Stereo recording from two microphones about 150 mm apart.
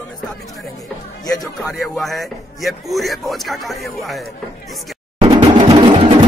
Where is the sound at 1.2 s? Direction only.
25° left (ahead or behind).